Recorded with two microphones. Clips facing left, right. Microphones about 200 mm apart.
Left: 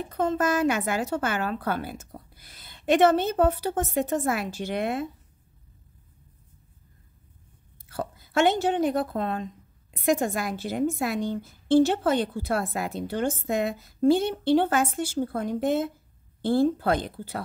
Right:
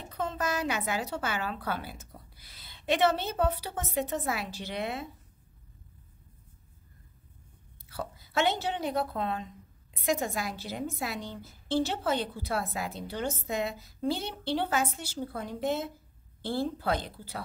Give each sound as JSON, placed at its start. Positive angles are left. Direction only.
{"t": 0.1, "sound": "a woman's voice", "side_deg": 50}
{"t": 7.9, "sound": "a woman's voice", "side_deg": 50}